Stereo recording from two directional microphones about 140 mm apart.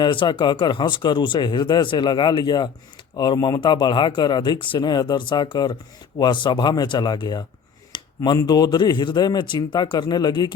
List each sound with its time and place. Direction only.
0.0 s speech: 35° left (ahead or behind)